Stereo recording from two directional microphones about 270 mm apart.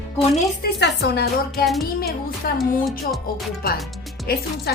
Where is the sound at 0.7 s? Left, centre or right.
Left.